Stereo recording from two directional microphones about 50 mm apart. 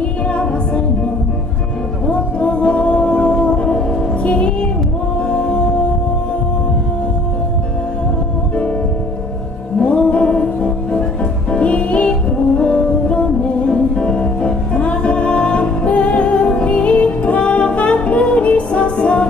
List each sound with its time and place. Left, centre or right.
0.3 s music: left
2.0 s music: left
9.8 s music: left